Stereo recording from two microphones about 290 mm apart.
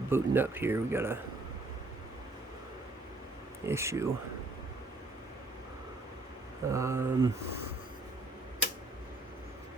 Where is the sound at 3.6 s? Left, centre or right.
Centre.